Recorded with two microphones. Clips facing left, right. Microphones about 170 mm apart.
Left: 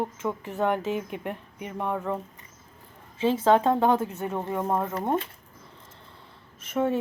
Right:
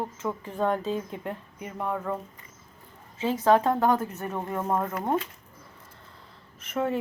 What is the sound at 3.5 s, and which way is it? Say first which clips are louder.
Speech: even; 25° left (ahead or behind).